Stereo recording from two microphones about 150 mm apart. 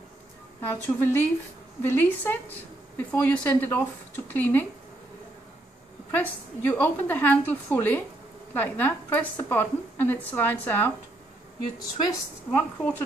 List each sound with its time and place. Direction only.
0.6 s a woman's voice: 15° left (ahead or behind)
6.1 s a woman's voice: 10° left (ahead or behind)
12.0 s a woman's voice: 20° left (ahead or behind)